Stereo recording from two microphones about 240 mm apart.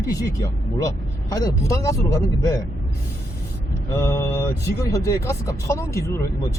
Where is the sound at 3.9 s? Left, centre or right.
Centre.